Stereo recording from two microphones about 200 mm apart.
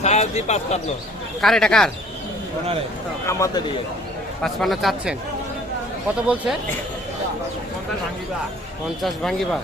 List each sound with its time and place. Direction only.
0.0 s speech: 35° left (ahead or behind)
1.4 s speech: centre (ahead or behind)
3.2 s speech: 15° left (ahead or behind)
4.4 s speech: centre (ahead or behind)
6.2 s speech: 5° right (ahead or behind)
9.0 s speech: centre (ahead or behind)